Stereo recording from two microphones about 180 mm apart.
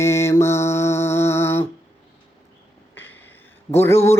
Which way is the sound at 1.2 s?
15° left (ahead or behind).